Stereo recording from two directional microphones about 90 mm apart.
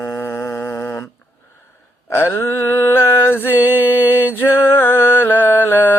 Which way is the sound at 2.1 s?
25° left (ahead or behind).